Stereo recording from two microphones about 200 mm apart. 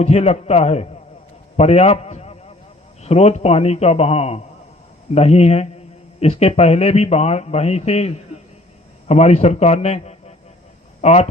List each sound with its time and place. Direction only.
0.0 s a man's voice: 35° left (ahead or behind)